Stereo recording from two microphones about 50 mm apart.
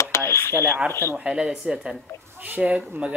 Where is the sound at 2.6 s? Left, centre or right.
Right.